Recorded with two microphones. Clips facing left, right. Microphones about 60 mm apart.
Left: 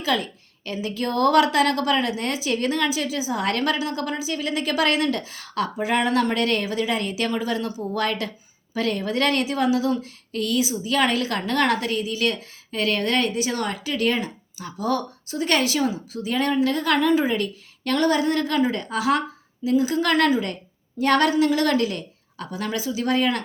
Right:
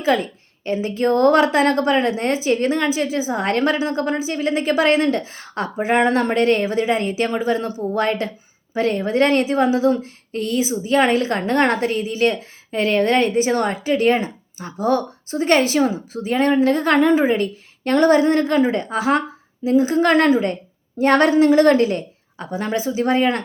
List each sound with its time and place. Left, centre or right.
0.0 s a woman's voice: right